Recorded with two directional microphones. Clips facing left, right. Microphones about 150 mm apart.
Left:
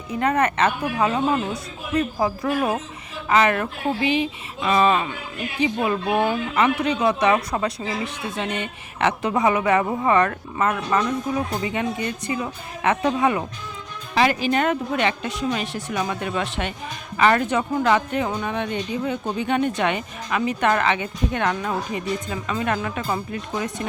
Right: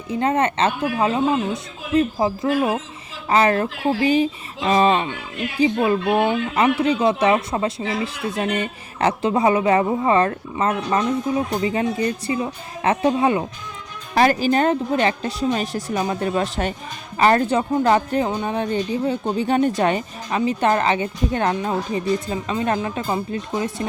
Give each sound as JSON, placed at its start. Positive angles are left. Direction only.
{"t": 0.1, "sound": "speech", "side_deg": -25}
{"t": 14.2, "sound": "speech", "side_deg": -40}